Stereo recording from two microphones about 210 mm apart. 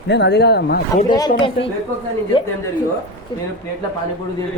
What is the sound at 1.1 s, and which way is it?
Speech, 20° left (ahead or behind).